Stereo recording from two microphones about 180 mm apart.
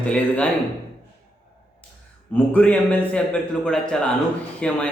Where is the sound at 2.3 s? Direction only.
10° left (ahead or behind).